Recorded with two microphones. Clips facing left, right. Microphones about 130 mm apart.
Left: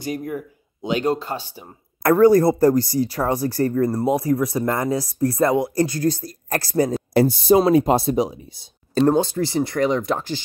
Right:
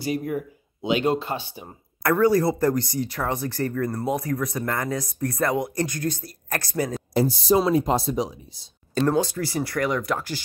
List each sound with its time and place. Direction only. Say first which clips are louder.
0.0 s speech: right 1 dB; 45° left (ahead or behind)
1.0 s speech: left 1 dB; 10° right (ahead or behind)
1.3 s speech: left 1 dB; 40° left (ahead or behind)
2.7 s speech: left 6 dB; 35° left (ahead or behind)
7.2 s speech: left 5 dB; 60° left (ahead or behind)
8.9 s speech: left 5 dB; 30° left (ahead or behind)